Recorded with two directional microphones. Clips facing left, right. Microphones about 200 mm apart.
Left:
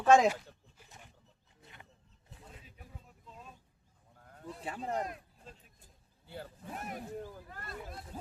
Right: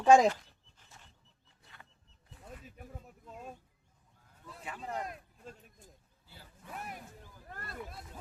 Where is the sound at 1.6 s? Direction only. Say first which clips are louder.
Left 3 dB; 20° left (ahead or behind).